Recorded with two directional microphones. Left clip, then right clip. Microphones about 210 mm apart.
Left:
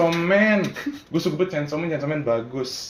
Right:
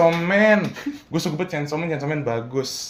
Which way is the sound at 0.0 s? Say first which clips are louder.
Right 2 dB; 55° right (ahead or behind).